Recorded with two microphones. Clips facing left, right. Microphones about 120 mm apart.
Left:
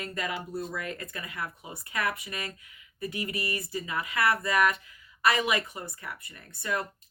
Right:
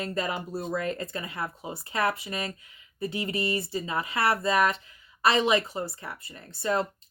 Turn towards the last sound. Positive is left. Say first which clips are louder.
# right 5 dB
turn(degrees=-25)  # may be behind; listen again after turning